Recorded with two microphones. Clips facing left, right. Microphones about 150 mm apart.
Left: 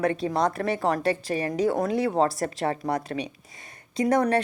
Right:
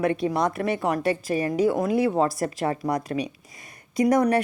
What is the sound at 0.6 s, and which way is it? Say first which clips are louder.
A woman's voice: right 1 dB; 40° left (ahead or behind).